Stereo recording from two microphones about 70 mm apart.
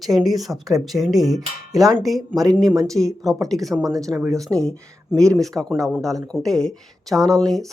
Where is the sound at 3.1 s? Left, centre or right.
Right.